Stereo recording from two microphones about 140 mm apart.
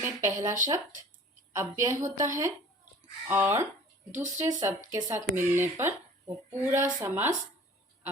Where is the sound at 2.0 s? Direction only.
65° right (ahead or behind).